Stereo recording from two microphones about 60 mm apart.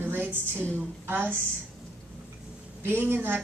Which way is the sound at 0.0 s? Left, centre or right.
Right.